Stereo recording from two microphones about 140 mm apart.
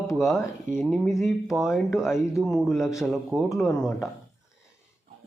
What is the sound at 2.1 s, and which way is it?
Speech, 20° left (ahead or behind).